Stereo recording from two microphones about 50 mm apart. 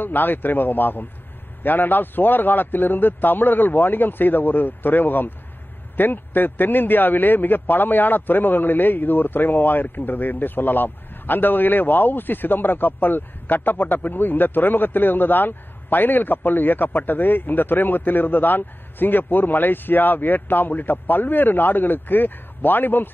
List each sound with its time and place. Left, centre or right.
0.0 s a man's voice: left